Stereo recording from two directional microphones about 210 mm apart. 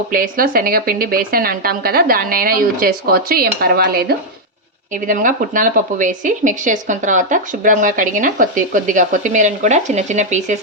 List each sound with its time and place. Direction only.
0.1 s speech: 40° right (ahead or behind)